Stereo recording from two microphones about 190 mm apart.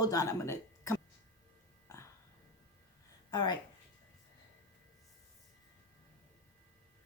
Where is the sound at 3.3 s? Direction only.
20° left (ahead or behind).